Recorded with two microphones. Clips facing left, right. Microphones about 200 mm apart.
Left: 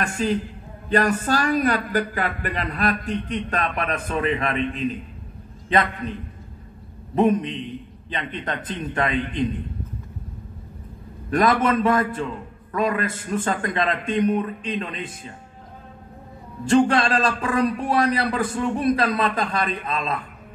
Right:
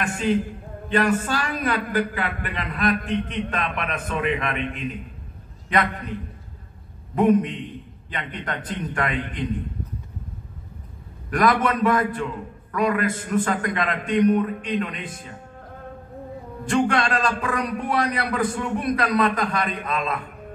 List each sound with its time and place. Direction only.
0.8 s a man's voice: 40° left (ahead or behind)
7.2 s a man's voice: 25° left (ahead or behind)
11.2 s a man's voice: 25° left (ahead or behind)
16.6 s a man's voice: 25° left (ahead or behind)